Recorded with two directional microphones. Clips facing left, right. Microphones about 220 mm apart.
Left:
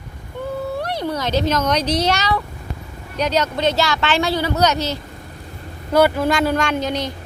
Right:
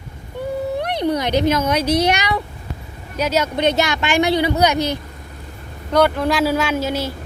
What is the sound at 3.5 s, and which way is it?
Speech, 20° right (ahead or behind).